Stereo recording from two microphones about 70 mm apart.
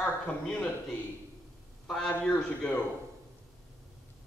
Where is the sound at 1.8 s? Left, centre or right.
Centre.